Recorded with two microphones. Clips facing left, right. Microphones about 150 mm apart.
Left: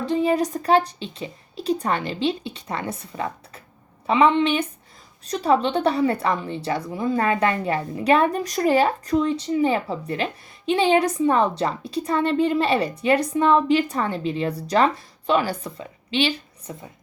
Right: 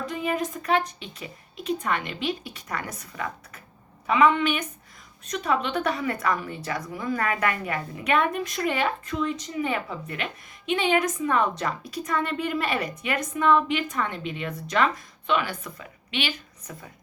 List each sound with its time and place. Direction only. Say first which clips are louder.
0.0 s a woman's voice: left 7 dB; 30° left (ahead or behind)